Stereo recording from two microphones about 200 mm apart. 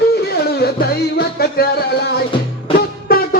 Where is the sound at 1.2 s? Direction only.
50° left (ahead or behind).